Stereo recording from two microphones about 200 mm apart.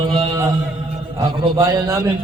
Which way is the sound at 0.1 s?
15° right (ahead or behind).